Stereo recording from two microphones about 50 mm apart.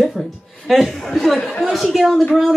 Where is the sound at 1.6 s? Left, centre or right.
Centre.